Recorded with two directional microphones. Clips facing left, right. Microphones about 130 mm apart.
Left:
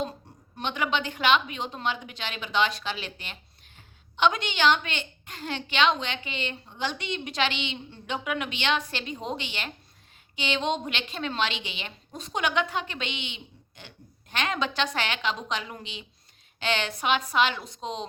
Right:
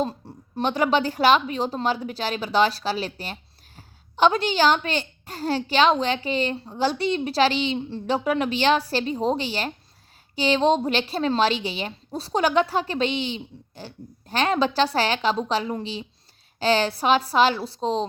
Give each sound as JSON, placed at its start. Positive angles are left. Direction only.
{"t": 0.5, "sound": "a woman's voice", "side_deg": -35}